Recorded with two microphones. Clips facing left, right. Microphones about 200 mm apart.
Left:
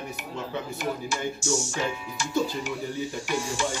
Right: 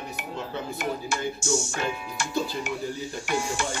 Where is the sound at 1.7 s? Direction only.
55° right (ahead or behind).